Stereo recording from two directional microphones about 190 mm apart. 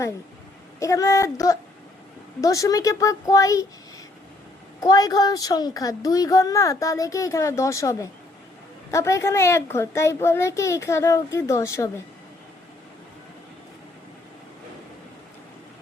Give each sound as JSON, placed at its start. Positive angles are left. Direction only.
{"t": 0.8, "sound": "a woman's voice", "side_deg": 15}
{"t": 4.8, "sound": "a woman's voice", "side_deg": 20}